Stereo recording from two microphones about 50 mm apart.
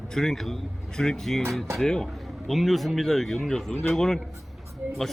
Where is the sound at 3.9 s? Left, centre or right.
Centre.